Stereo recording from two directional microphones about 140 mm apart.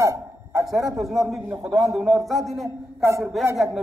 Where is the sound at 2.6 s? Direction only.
20° right (ahead or behind).